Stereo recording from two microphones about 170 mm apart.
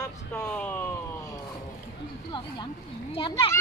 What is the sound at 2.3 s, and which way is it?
Speech, 30° left (ahead or behind).